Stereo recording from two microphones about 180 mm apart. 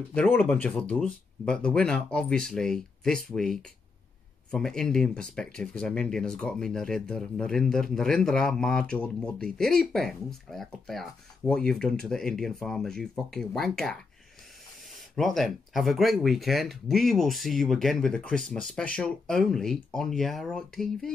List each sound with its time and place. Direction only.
0.1 s speech: 10° left (ahead or behind)
15.1 s speech: centre (ahead or behind)